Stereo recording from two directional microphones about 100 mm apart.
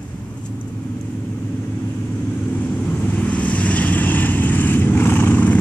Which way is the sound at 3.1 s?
15° left (ahead or behind).